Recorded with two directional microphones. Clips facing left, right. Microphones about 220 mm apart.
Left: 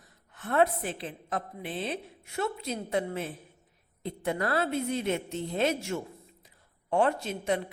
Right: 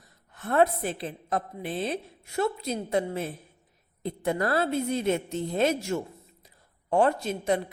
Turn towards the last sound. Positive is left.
turn(degrees=-40)  # may be behind; listen again after turning